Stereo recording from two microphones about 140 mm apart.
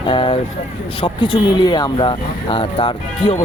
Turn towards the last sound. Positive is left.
turn(degrees=35)  # may be behind; listen again after turning